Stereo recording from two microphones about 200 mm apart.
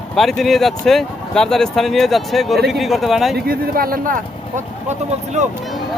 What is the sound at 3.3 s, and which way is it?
Speech, 45° right (ahead or behind).